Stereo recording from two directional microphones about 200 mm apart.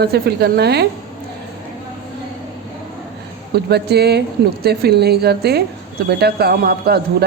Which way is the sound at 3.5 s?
55° right (ahead or behind).